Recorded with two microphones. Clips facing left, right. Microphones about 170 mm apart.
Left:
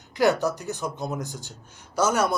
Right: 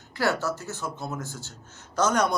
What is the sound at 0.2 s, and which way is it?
Speech, 15° left (ahead or behind).